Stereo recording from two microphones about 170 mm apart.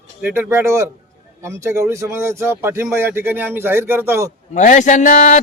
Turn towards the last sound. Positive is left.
turn(degrees=45)  # may be behind; listen again after turning